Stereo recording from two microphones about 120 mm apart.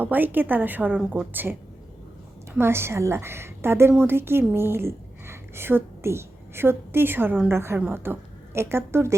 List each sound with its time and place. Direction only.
0.0 s a woman's voice: 15° right (ahead or behind)